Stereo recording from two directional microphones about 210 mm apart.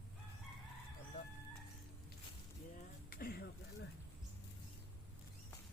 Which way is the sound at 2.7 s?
45° left (ahead or behind).